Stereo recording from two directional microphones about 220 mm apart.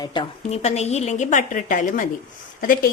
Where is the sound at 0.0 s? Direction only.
20° left (ahead or behind).